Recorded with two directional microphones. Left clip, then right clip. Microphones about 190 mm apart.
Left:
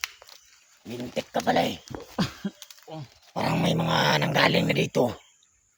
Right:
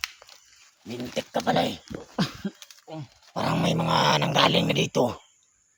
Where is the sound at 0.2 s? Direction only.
15° left (ahead or behind).